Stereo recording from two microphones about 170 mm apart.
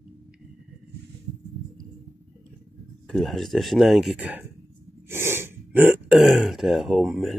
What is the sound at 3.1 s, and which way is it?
Speech, centre (ahead or behind).